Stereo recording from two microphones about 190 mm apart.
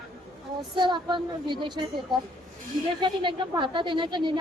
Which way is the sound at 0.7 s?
25° right (ahead or behind).